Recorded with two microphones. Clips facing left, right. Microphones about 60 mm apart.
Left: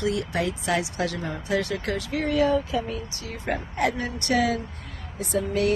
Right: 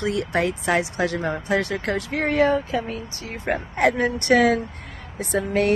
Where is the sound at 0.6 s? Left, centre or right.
Right.